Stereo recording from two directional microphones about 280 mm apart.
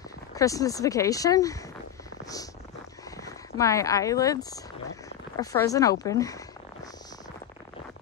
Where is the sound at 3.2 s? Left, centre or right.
Centre.